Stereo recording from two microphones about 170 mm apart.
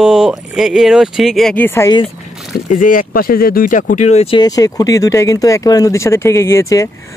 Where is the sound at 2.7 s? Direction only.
50° left (ahead or behind).